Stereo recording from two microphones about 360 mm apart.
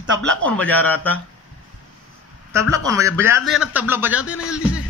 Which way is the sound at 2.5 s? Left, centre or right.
Centre.